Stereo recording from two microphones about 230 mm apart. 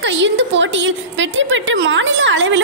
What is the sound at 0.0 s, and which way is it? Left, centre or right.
A woman's voice, right.